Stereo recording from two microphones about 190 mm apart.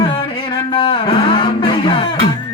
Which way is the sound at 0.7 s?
25° left (ahead or behind).